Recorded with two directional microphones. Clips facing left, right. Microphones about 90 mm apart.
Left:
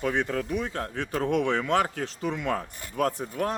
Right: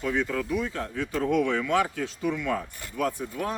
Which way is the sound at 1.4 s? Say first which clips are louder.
Even; 30° left (ahead or behind).